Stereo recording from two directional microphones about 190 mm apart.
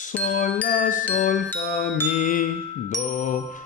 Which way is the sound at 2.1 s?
45° left (ahead or behind).